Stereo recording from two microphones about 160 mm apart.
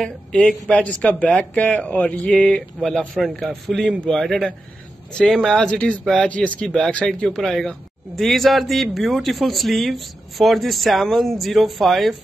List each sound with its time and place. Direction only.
0.0 s speech: 5° left (ahead or behind)